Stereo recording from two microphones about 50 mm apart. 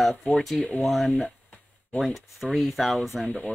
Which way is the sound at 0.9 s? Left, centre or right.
Centre.